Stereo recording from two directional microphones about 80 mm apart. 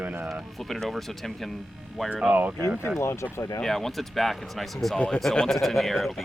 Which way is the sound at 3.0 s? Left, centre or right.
Left.